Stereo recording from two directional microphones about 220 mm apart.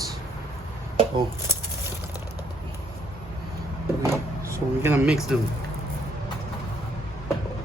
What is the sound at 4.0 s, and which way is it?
Vehicle, 15° right (ahead or behind).